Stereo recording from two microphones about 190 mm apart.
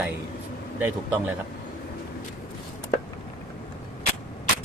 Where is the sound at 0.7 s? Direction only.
10° right (ahead or behind).